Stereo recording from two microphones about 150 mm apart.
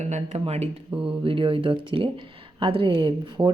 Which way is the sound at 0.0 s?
50° right (ahead or behind).